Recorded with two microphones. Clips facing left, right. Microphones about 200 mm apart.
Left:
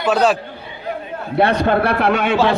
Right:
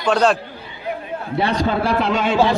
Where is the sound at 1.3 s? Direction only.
60° left (ahead or behind).